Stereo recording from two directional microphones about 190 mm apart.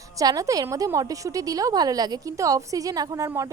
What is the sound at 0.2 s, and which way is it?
A woman's voice, 20° right (ahead or behind).